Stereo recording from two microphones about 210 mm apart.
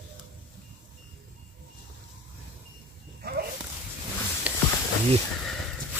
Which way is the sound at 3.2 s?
50° right (ahead or behind).